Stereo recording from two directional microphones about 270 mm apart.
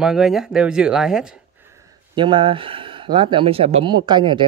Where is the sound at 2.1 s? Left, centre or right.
Centre.